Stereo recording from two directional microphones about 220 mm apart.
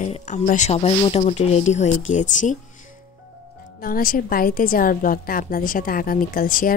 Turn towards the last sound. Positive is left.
turn(degrees=40)  # may be behind; listen again after turning